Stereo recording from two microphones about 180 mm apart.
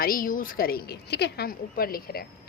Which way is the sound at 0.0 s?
50° left (ahead or behind).